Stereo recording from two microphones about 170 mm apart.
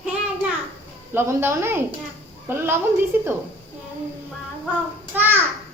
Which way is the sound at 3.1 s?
10° right (ahead or behind).